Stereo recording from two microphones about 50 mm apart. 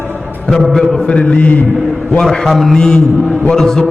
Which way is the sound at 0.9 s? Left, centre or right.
Left.